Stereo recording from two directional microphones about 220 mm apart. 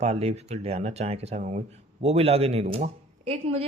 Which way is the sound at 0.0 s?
30° right (ahead or behind).